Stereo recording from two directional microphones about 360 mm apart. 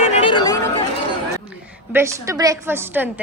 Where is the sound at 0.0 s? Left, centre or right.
Centre.